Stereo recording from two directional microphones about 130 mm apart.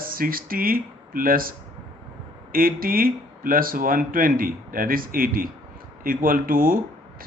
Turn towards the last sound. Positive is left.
turn(degrees=-90)